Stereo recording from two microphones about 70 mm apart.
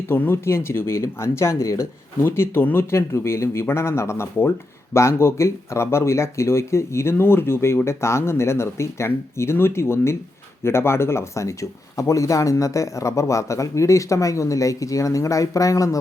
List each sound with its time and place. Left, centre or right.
0.1 s speech: left